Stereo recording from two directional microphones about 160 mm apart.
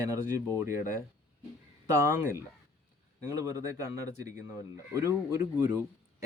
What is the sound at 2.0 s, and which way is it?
Speech, 15° right (ahead or behind).